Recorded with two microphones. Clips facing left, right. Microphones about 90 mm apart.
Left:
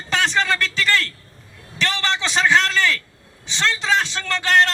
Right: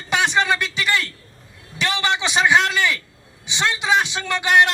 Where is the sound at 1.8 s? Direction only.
15° right (ahead or behind).